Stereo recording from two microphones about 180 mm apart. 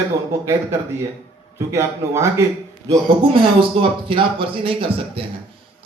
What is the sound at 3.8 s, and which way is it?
A man's voice, 30° right (ahead or behind).